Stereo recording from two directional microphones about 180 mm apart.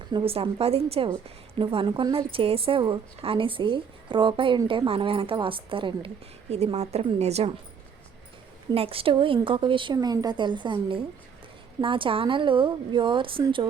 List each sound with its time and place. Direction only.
0.1 s a woman's voice: 30° right (ahead or behind)
8.7 s a woman's voice: 30° right (ahead or behind)